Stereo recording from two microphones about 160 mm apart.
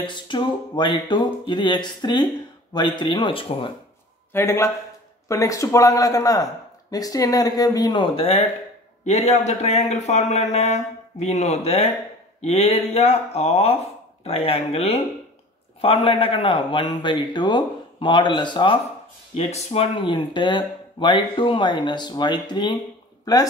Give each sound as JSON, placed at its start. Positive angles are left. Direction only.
{"t": 0.0, "sound": "speech", "side_deg": 30}
{"t": 4.3, "sound": "a man's voice", "side_deg": 15}
{"t": 19.3, "sound": "speech", "side_deg": 40}